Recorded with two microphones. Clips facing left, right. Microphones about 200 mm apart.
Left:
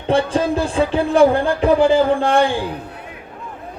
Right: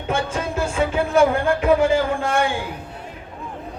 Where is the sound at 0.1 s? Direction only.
30° left (ahead or behind).